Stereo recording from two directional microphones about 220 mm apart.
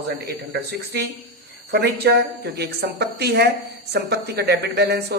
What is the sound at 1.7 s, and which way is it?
A woman's voice, 50° right (ahead or behind).